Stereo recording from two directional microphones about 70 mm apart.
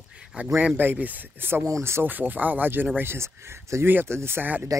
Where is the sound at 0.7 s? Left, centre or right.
Right.